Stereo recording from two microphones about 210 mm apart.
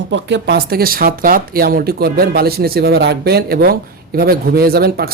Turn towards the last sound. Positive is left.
turn(degrees=-45)  # may be behind; listen again after turning